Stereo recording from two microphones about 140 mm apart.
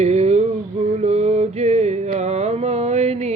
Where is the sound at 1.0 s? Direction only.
50° right (ahead or behind).